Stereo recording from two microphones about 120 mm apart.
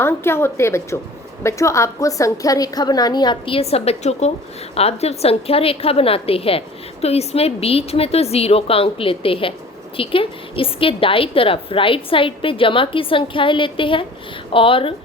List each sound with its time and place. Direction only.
0.0 s a woman's voice: 20° left (ahead or behind); by 14.9 s 50° left (ahead or behind)